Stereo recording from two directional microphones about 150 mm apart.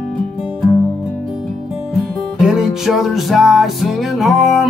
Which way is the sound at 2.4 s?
5° right (ahead or behind).